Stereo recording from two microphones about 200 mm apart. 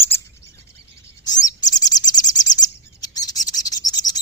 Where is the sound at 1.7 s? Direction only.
20° left (ahead or behind).